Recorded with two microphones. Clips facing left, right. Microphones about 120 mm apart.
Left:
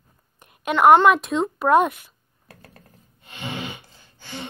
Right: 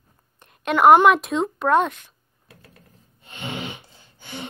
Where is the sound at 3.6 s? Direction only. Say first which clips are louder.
Even; 15° right (ahead or behind).